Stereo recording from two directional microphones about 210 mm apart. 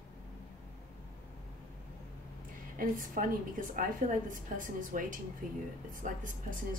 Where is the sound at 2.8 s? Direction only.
40° right (ahead or behind).